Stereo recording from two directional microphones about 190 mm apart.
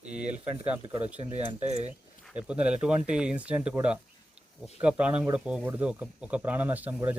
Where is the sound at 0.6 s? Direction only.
5° right (ahead or behind).